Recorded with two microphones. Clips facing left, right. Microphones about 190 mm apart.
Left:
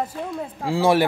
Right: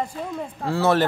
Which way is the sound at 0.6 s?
10° left (ahead or behind).